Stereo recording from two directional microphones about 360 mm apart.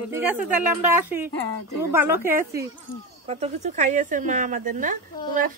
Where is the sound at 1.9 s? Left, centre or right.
Centre.